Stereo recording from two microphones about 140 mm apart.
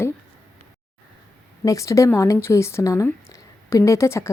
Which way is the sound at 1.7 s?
20° left (ahead or behind).